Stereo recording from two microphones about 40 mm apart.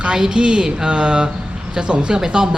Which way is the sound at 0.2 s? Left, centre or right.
Centre.